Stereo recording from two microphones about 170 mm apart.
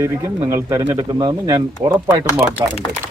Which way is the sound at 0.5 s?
15° right (ahead or behind).